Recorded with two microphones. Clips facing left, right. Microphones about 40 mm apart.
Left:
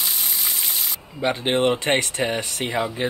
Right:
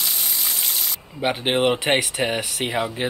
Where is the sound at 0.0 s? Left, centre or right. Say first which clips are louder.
Even; centre.